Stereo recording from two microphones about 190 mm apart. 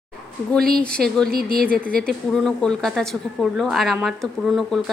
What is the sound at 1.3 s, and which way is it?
Speech, 50° right (ahead or behind).